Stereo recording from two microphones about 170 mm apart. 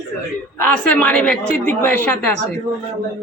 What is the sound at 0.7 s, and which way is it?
A woman's voice, 10° left (ahead or behind).